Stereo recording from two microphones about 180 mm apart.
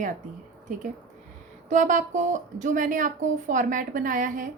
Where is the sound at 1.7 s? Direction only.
45° right (ahead or behind).